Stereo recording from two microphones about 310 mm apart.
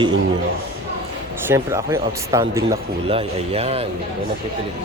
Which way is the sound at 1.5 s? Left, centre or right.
Centre.